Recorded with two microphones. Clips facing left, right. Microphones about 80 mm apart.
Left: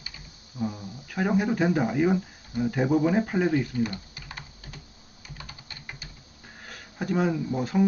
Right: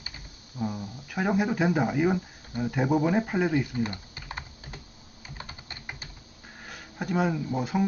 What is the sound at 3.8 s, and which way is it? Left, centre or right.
Typing, right.